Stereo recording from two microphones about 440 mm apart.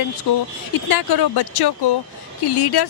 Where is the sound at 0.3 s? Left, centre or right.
Left.